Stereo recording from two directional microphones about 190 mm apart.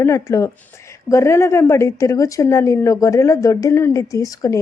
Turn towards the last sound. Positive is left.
turn(degrees=20)  # may be behind; listen again after turning